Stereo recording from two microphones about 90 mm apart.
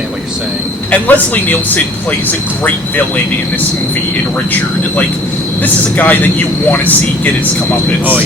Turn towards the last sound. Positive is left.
turn(degrees=20)  # may be behind; listen again after turning